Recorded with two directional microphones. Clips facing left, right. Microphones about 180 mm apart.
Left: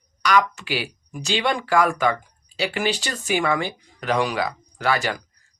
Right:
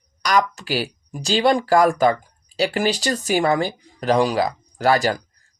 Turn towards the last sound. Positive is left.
turn(degrees=-35)  # may be behind; listen again after turning